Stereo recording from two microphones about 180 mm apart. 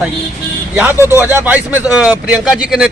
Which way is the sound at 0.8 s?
10° right (ahead or behind).